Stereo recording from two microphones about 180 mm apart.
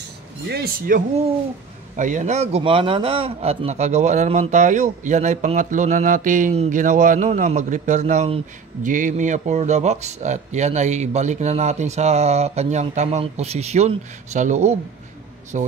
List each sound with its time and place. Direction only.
0.5 s a man's voice: 55° right (ahead or behind)